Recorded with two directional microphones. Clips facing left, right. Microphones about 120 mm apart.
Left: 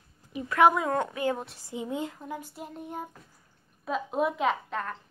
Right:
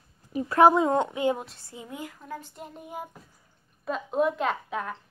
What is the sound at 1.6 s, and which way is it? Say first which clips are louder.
Speech: left 6 dB; 20° left (ahead or behind).